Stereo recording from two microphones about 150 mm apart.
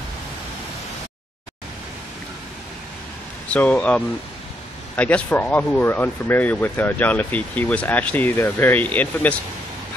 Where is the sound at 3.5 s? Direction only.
10° left (ahead or behind).